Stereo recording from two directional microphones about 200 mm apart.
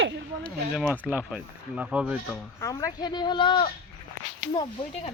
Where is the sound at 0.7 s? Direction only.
5° right (ahead or behind).